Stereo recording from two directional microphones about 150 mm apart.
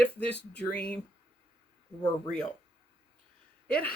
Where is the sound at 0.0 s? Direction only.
10° left (ahead or behind).